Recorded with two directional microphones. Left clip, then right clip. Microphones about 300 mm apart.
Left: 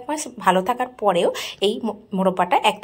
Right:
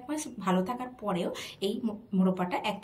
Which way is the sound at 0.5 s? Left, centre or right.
Left.